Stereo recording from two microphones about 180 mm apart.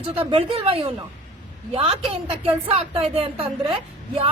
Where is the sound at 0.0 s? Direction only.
30° right (ahead or behind).